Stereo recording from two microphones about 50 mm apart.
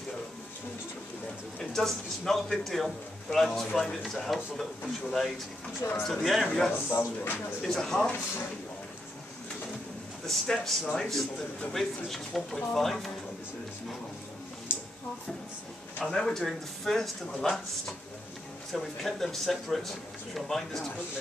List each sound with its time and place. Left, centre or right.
1.6 s a man's voice: centre
5.8 s speech: left
6.0 s a man's voice: centre
6.7 s speech: left
7.6 s speech: centre
10.2 s a man's voice: centre
14.7 s a sound: left
16.0 s a man's voice: centre